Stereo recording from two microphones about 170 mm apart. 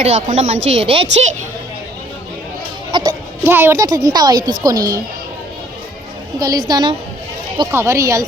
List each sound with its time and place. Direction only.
0.0 s speech: 40° right (ahead or behind)
2.9 s a woman's voice: 30° right (ahead or behind)
3.4 s a woman's voice: 15° right (ahead or behind)
6.4 s a woman's voice: 20° right (ahead or behind)